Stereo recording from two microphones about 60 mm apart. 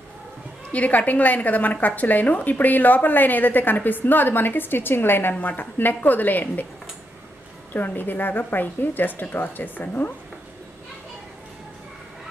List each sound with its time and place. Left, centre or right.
0.7 s a woman's voice: left
7.7 s a woman's voice: left